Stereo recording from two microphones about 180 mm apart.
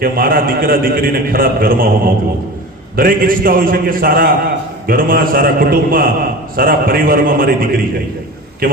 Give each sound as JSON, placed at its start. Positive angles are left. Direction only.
{"t": 0.0, "sound": "a man's voice", "side_deg": -55}